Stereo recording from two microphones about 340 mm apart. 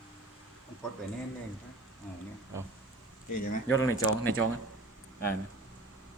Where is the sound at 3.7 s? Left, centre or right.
Left.